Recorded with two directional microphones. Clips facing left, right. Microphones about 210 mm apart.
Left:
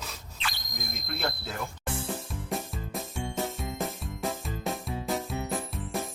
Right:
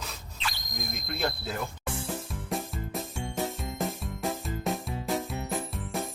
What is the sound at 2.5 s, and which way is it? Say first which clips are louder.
Music: right 1 dB; centre (ahead or behind).